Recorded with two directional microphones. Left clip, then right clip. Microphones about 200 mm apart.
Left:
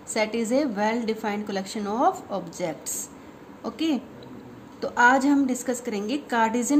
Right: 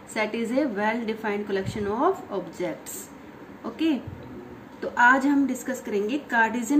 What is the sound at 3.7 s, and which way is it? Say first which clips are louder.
A woman's voice: right 1 dB; 55° left (ahead or behind).